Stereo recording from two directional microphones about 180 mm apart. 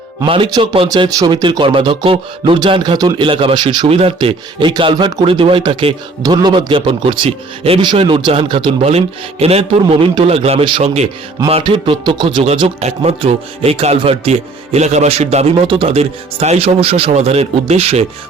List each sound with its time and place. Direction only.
0.3 s speech: 30° right (ahead or behind)